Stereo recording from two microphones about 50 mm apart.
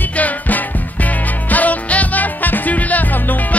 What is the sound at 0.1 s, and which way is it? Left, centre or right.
Music, left.